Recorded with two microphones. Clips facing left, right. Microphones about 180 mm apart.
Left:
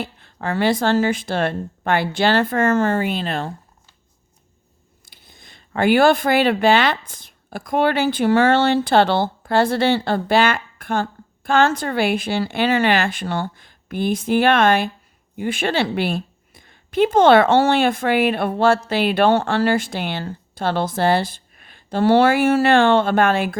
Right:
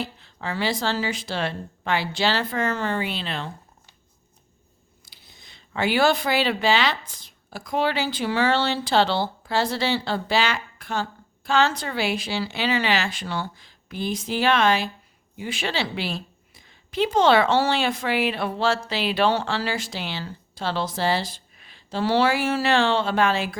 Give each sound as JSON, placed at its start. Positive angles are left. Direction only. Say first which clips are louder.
{"t": 0.0, "sound": "speech", "louder": "left 4 dB", "side_deg": 55}
{"t": 5.0, "sound": "speech", "louder": "left 4 dB", "side_deg": 50}